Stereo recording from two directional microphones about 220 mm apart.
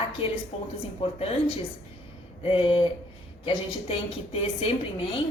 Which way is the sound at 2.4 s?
25° left (ahead or behind).